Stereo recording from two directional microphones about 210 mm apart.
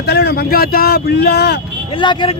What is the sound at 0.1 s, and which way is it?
Speech, 50° left (ahead or behind).